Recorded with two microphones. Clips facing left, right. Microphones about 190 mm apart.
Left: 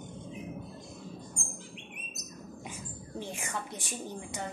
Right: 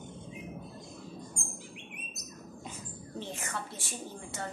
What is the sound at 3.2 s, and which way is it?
A woman's voice, 15° left (ahead or behind).